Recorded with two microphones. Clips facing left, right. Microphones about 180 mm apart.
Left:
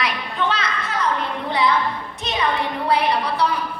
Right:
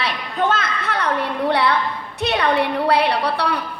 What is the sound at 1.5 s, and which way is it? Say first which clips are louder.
A woman's voice: left 1 dB; 65° right (ahead or behind).